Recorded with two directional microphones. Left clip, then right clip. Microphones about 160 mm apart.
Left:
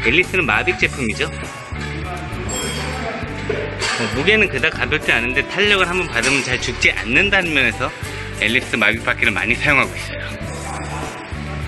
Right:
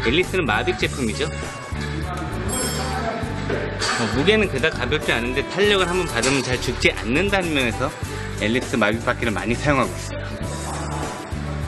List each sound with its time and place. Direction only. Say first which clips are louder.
0.0 s speech: left 4 dB; centre (ahead or behind)
4.2 s speech: left 4 dB; 10° right (ahead or behind)
8.4 s speech: left 4 dB; 25° right (ahead or behind)